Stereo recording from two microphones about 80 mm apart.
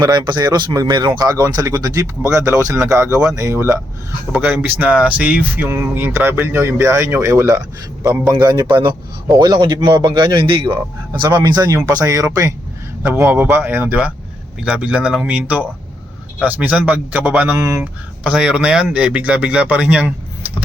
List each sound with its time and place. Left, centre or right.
0.0 s a man's voice: right
4.3 s a man's voice: centre; by 7.6 s right
8.3 s a man's voice: right
9.4 s a man's voice: right
9.9 s a man's voice: right
11.3 s speech: right
11.6 s a man's voice: right
17.6 s speech: right
18.2 s a man's voice: centre